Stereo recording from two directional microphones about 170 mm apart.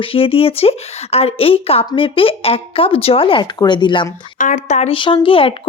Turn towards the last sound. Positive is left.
turn(degrees=30)  # may be behind; listen again after turning